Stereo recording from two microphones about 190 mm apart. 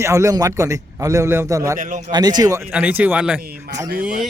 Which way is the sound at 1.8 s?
40° right (ahead or behind).